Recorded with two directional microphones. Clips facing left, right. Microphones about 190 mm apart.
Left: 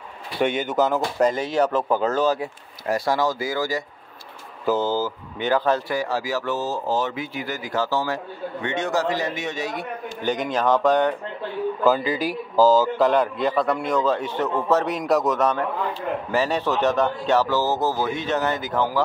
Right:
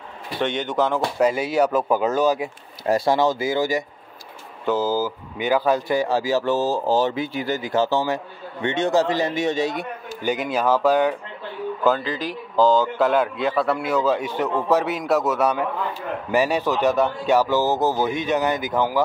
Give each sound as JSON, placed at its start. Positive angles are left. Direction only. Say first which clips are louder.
{"t": 0.4, "sound": "a man's voice", "louder": "left 1 dB", "side_deg": 5}
{"t": 1.2, "sound": "a man's voice", "louder": "right 1 dB", "side_deg": -10}
{"t": 2.9, "sound": "speech", "louder": "right 3 dB", "side_deg": -25}
{"t": 4.6, "sound": "a man's voice", "louder": "right 1 dB", "side_deg": -5}
{"t": 5.9, "sound": "speech", "louder": "right 4 dB", "side_deg": -25}
{"t": 10.2, "sound": "a man's voice", "louder": "right 1 dB", "side_deg": -10}
{"t": 11.8, "sound": "a man's voice", "louder": "left 1 dB", "side_deg": 5}